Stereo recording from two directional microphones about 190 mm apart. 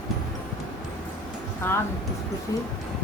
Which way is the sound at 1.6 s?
10° left (ahead or behind).